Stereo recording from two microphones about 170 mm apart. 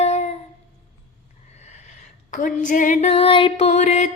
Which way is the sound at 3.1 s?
35° left (ahead or behind).